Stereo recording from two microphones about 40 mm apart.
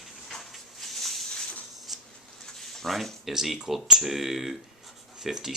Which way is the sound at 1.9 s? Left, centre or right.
Centre.